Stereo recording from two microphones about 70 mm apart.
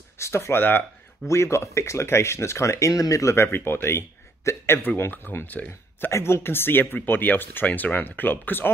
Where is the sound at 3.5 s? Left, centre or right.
Left.